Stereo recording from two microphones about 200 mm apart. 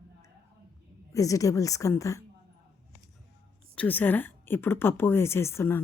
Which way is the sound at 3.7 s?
5° left (ahead or behind).